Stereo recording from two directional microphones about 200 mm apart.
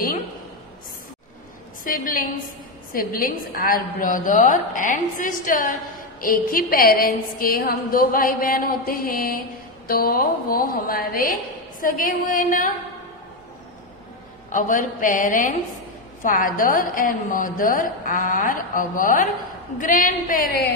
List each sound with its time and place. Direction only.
1.9 s a woman's voice: 45° left (ahead or behind)
14.5 s a woman's voice: 40° left (ahead or behind)